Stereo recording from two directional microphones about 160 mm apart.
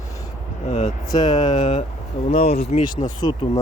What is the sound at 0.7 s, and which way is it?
Speech, 45° left (ahead or behind).